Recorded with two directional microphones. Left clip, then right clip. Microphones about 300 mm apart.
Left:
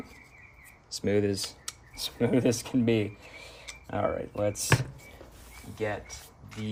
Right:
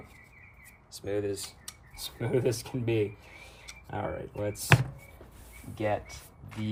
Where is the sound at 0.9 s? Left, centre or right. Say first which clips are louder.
Left 5 dB; left.